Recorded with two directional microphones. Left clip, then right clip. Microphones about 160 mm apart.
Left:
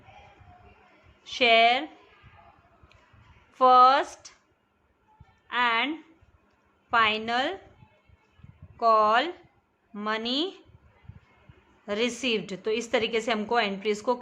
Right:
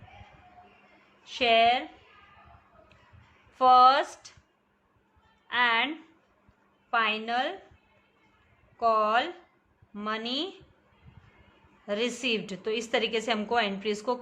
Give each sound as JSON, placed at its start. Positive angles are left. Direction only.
{"t": 1.2, "sound": "speech", "side_deg": 30}
{"t": 3.6, "sound": "a woman's voice", "side_deg": 20}
{"t": 5.5, "sound": "speech", "side_deg": 20}
{"t": 6.9, "sound": "a woman's voice", "side_deg": 30}
{"t": 8.8, "sound": "a woman's voice", "side_deg": 25}
{"t": 11.9, "sound": "a woman's voice", "side_deg": 25}